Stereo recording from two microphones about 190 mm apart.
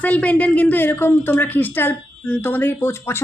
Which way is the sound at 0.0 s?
5° left (ahead or behind).